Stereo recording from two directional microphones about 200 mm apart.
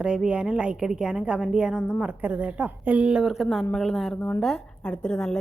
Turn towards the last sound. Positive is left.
turn(degrees=5)  # may be behind; listen again after turning